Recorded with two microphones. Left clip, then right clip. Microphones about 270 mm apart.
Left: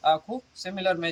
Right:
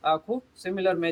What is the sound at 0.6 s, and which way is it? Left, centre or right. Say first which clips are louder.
Speech: even; centre.